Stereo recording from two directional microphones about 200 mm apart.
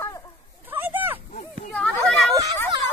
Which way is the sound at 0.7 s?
10° right (ahead or behind).